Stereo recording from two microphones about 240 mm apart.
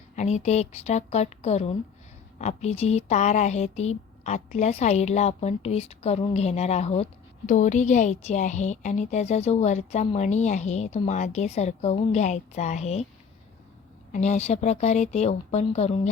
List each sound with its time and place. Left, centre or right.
0.2 s speech: left
14.1 s speech: left